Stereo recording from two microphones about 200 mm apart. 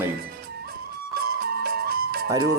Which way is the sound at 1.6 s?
50° right (ahead or behind).